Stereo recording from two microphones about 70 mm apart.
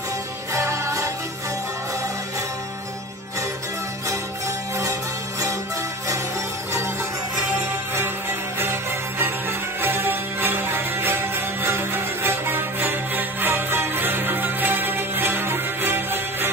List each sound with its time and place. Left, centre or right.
0.5 s music: right
9.2 s music: right